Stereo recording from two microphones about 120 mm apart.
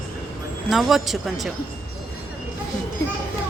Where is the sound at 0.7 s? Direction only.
Centre (ahead or behind).